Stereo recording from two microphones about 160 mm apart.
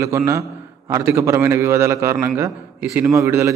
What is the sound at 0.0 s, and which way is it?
A man's voice, 15° right (ahead or behind).